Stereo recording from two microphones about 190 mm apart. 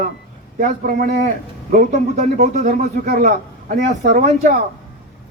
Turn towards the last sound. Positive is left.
turn(degrees=-40)  # may be behind; listen again after turning